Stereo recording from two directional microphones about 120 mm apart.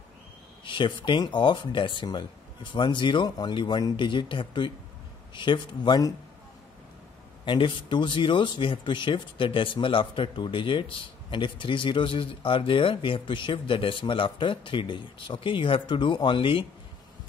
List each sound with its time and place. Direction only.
0.7 s speech: 45° left (ahead or behind)
7.4 s speech: 45° left (ahead or behind)